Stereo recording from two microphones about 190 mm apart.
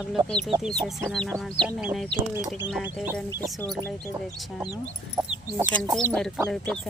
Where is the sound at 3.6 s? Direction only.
Centre (ahead or behind).